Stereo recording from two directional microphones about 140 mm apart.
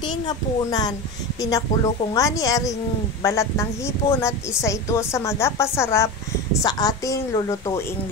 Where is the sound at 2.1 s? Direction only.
25° left (ahead or behind).